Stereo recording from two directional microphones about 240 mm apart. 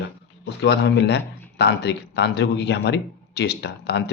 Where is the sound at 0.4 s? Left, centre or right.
Left.